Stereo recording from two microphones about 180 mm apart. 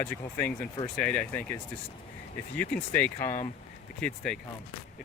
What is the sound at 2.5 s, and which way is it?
Speech, 5° left (ahead or behind).